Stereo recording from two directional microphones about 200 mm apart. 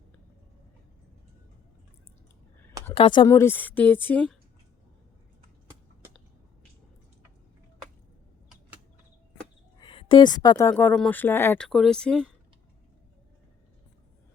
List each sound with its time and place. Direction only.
2.9 s speech: 25° left (ahead or behind)
3.2 s speech: 15° left (ahead or behind)
9.7 s speech: 25° left (ahead or behind); by 12.3 s 5° left (ahead or behind)